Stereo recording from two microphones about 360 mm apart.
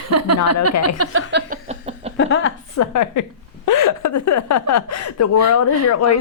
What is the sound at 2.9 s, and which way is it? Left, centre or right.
Speech, left.